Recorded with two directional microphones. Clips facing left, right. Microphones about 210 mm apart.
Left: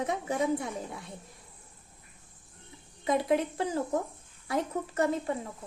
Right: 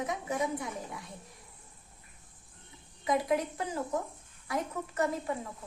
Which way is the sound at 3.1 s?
25° left (ahead or behind).